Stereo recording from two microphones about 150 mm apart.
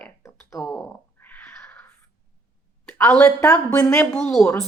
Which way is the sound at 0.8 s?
10° left (ahead or behind).